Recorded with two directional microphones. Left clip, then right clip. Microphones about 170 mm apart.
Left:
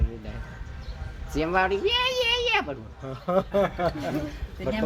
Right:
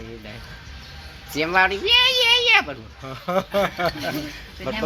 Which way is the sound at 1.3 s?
Centre (ahead or behind).